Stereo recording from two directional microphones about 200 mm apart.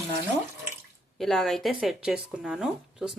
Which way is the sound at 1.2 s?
Centre (ahead or behind).